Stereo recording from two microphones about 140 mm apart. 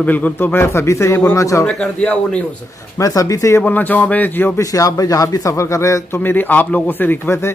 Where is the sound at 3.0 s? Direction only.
25° left (ahead or behind).